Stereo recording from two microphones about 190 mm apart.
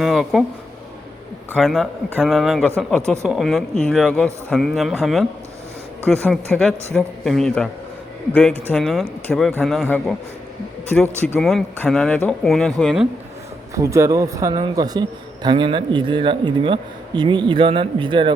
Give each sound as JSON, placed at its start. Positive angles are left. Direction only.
{"t": 0.0, "sound": "a man's voice", "side_deg": 0}
{"t": 1.5, "sound": "a man's voice", "side_deg": 0}
{"t": 11.3, "sound": "a man's voice", "side_deg": 0}
{"t": 13.7, "sound": "speech", "side_deg": -15}